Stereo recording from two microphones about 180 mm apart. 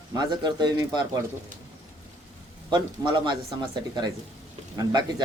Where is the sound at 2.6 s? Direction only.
25° right (ahead or behind).